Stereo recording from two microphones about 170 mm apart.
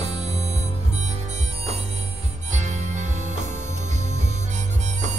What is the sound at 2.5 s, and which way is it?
Music, 45° right (ahead or behind).